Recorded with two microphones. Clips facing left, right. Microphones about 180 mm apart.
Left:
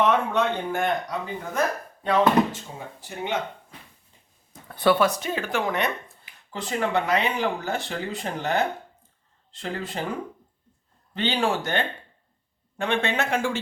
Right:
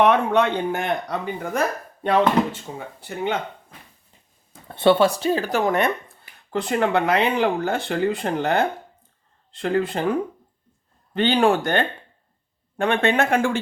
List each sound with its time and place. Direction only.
0.0 s speech: 65° right (ahead or behind)
4.7 s speech: 25° right (ahead or behind); by 5.9 s 45° right (ahead or behind)
6.5 s speech: 60° right (ahead or behind)
11.1 s speech: 55° right (ahead or behind)